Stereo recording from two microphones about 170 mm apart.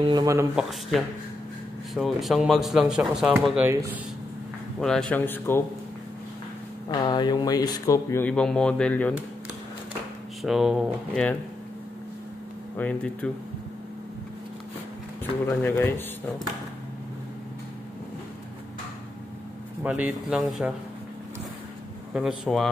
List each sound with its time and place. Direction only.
0.0 s speech: 25° right (ahead or behind)
0.6 s speech: centre (ahead or behind)
3.6 s speech: 15° right (ahead or behind)
4.7 s speech: centre (ahead or behind)
6.9 s speech: 25° left (ahead or behind); by 9.1 s 5° left (ahead or behind)
10.4 s speech: centre (ahead or behind)
12.7 s speech: 10° left (ahead or behind)
15.4 s speech: 10° left (ahead or behind)
19.8 s speech: 5° right (ahead or behind)
22.1 s speech: 5° right (ahead or behind)